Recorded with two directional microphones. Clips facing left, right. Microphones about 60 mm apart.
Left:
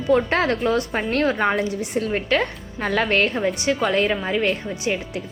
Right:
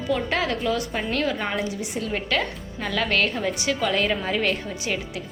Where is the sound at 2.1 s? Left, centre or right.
Left.